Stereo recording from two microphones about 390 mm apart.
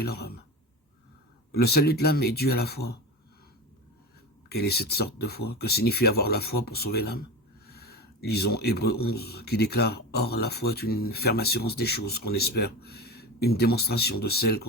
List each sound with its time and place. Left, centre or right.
0.0 s speech: left
1.5 s speech: left
4.4 s speech: left